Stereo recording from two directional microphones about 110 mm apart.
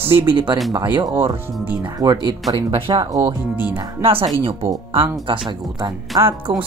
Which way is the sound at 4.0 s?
55° right (ahead or behind).